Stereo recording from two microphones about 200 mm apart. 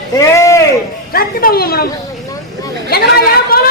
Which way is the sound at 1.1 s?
50° left (ahead or behind).